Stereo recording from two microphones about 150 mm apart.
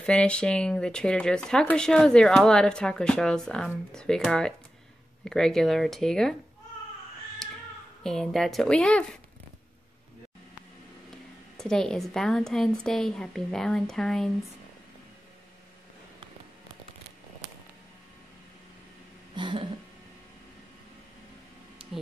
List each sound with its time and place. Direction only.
0.0 s speech: 5° left (ahead or behind)
8.0 s speech: 5° left (ahead or behind)
11.5 s speech: 5° left (ahead or behind)
19.3 s a sound: 30° right (ahead or behind)